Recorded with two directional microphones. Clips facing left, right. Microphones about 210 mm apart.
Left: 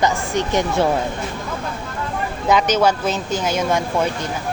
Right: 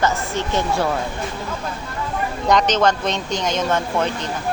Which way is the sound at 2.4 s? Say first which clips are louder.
Left 1 dB; 5° left (ahead or behind).